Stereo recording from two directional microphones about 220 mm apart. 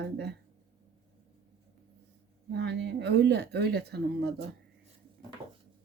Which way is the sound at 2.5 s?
50° right (ahead or behind).